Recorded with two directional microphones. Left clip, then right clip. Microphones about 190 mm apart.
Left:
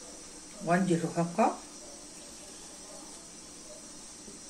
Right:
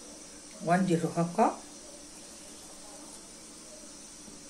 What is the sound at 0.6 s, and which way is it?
Speech, 25° right (ahead or behind).